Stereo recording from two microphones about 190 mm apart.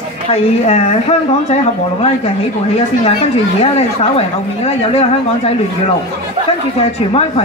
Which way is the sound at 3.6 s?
35° left (ahead or behind).